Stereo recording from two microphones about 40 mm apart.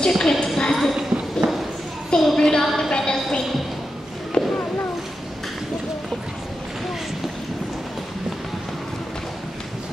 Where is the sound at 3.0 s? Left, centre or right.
Centre.